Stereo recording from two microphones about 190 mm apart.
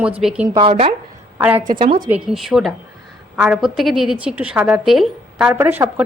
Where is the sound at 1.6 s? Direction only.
45° right (ahead or behind).